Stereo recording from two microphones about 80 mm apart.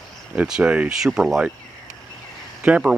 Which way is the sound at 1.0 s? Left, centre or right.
Centre.